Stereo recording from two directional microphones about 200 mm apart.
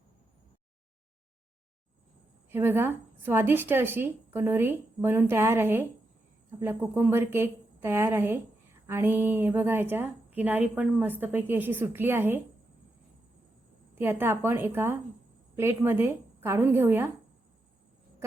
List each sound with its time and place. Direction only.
2.5 s a woman's voice: 10° right (ahead or behind)
14.0 s a woman's voice: 10° right (ahead or behind)